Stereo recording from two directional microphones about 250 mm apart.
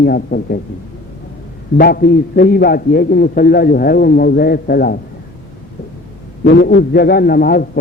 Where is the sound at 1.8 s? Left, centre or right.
Left.